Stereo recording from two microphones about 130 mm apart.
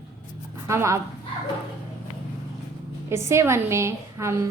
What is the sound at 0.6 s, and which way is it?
Speech, 20° right (ahead or behind).